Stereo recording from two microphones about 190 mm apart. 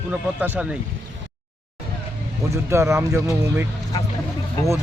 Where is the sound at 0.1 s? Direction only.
5° right (ahead or behind).